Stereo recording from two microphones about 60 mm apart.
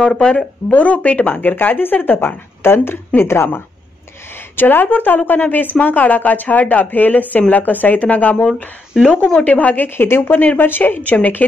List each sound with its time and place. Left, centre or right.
0.7 s a woman's voice: left
9.8 s a woman's voice: left